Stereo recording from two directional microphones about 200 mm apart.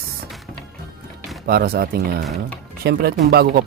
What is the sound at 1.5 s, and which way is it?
Speech, 50° right (ahead or behind).